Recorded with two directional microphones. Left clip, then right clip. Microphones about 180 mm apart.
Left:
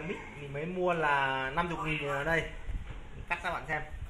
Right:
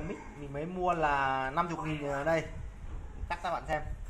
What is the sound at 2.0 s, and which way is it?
A woman's voice, 20° right (ahead or behind).